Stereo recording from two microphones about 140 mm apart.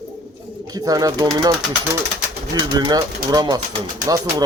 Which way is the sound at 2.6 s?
30° right (ahead or behind).